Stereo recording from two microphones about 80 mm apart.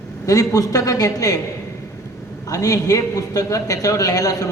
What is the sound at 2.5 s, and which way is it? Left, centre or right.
A man's voice, left.